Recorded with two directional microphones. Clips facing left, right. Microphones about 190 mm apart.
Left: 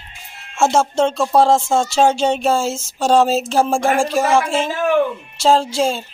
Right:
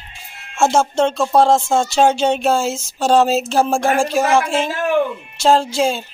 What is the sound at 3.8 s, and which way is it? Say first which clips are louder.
Speech: even; 10° left (ahead or behind).